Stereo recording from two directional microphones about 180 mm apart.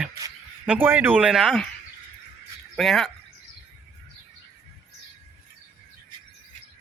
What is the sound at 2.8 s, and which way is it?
Speech, centre (ahead or behind).